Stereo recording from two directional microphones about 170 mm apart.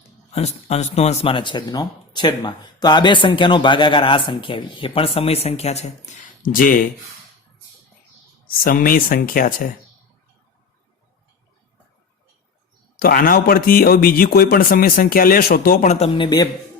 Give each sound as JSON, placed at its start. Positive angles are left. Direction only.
{"t": 0.3, "sound": "speech", "side_deg": 40}
{"t": 6.4, "sound": "speech", "side_deg": 55}
{"t": 8.4, "sound": "a man's voice", "side_deg": 60}
{"t": 13.0, "sound": "a man's voice", "side_deg": 60}
{"t": 16.1, "sound": "speech", "side_deg": 25}